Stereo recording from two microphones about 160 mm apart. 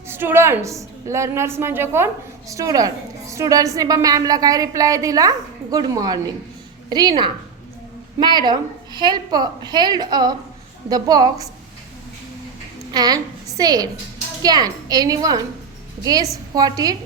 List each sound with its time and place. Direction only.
0.1 s a woman's voice: 15° right (ahead or behind)
12.9 s a woman's voice: 25° right (ahead or behind)